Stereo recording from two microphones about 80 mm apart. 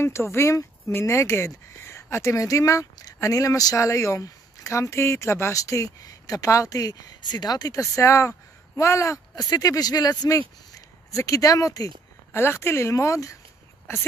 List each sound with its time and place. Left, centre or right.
0.0 s speech: left
11.1 s speech: left
12.3 s speech: left